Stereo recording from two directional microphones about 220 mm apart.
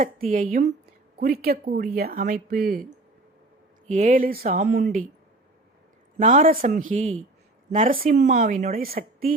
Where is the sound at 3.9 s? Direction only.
35° right (ahead or behind).